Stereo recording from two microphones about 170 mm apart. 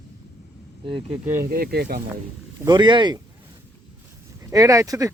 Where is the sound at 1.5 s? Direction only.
60° right (ahead or behind).